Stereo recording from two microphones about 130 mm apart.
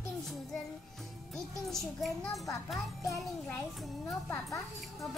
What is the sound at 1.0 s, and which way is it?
A child's voice, centre (ahead or behind).